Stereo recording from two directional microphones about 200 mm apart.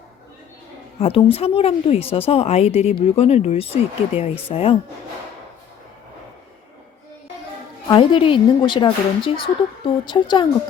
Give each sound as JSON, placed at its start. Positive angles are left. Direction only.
{"t": 0.9, "sound": "a woman's voice", "side_deg": 30}
{"t": 7.9, "sound": "a woman's voice", "side_deg": 25}